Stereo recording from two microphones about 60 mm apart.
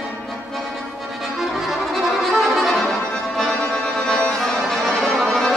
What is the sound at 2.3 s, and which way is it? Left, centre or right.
Music, centre.